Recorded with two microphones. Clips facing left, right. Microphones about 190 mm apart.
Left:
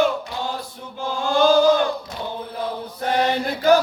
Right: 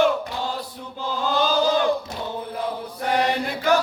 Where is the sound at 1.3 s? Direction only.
50° left (ahead or behind).